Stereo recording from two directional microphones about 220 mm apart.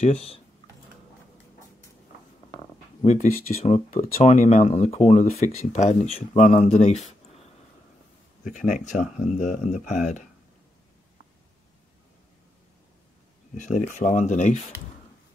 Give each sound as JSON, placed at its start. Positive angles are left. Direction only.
{"t": 0.0, "sound": "speech", "side_deg": 30}
{"t": 3.0, "sound": "speech", "side_deg": 35}
{"t": 8.5, "sound": "speech", "side_deg": 35}
{"t": 13.6, "sound": "speech", "side_deg": 35}